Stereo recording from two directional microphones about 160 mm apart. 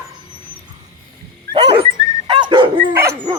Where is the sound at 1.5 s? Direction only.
35° right (ahead or behind).